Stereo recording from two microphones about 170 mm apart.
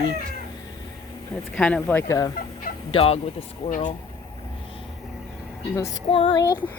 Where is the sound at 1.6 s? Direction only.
5° left (ahead or behind).